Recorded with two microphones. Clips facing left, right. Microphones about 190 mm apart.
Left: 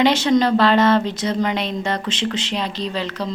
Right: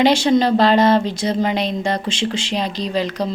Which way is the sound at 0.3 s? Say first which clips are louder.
Right 1 dB; 30° right (ahead or behind).